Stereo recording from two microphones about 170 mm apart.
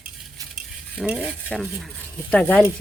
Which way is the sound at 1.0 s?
5° right (ahead or behind).